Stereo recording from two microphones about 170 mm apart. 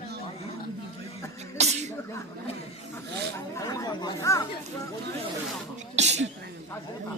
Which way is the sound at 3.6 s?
20° left (ahead or behind).